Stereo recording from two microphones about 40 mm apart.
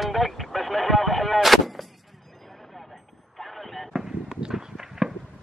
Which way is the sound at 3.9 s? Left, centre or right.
Centre.